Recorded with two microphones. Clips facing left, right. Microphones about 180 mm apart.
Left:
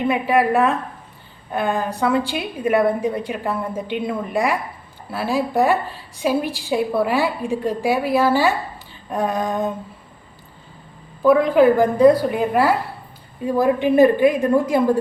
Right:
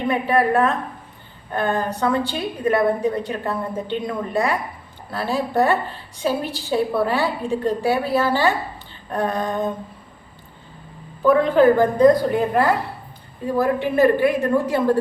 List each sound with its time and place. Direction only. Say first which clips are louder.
0.1 s a woman's voice: right 1 dB; 10° left (ahead or behind)
11.2 s a woman's voice: left 1 dB; 10° left (ahead or behind)